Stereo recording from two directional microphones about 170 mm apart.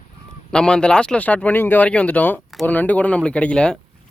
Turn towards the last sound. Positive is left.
turn(degrees=5)  # may be behind; listen again after turning